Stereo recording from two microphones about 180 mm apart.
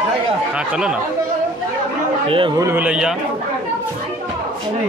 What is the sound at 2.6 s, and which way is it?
Speech, 10° right (ahead or behind).